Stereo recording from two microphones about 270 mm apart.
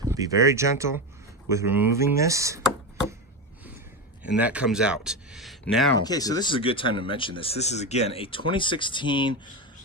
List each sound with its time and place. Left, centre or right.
0.0 s speech: centre
4.2 s speech: centre
6.0 s speech: centre